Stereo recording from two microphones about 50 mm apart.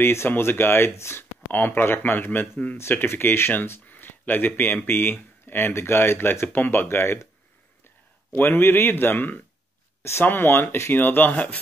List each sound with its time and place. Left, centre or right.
0.0 s speech: left
1.5 s speech: left
3.9 s speech: left
8.3 s speech: left